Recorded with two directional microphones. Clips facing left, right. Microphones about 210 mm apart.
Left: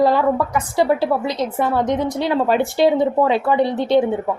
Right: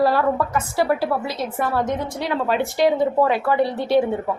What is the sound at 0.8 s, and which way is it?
A woman's voice, 25° left (ahead or behind).